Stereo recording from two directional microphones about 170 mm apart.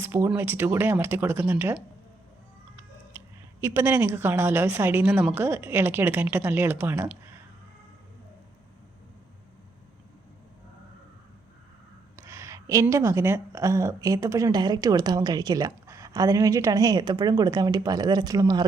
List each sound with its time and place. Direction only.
0.0 s a woman's voice: 15° right (ahead or behind)
3.1 s a woman's voice: 15° right (ahead or behind)
12.1 s speech: 15° right (ahead or behind)